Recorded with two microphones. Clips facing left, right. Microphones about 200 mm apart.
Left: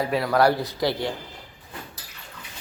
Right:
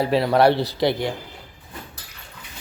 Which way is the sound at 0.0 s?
30° right (ahead or behind).